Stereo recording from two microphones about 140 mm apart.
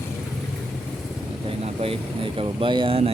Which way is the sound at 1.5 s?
40° right (ahead or behind).